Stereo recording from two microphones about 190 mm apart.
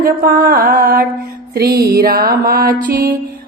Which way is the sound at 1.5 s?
55° right (ahead or behind).